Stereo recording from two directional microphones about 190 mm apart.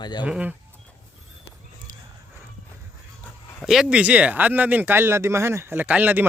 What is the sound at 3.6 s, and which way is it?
Speech, 5° right (ahead or behind).